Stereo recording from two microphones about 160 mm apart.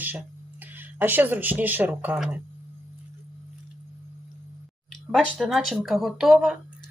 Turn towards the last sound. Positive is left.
turn(degrees=-5)  # may be behind; listen again after turning